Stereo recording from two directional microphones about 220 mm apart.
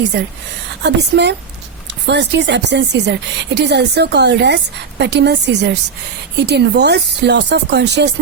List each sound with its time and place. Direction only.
0.1 s speech: 50° right (ahead or behind)